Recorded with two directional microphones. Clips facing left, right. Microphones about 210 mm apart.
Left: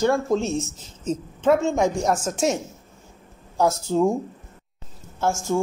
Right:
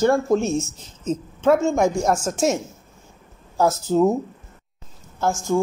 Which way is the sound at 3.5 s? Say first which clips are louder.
Right 2 dB; 5° right (ahead or behind).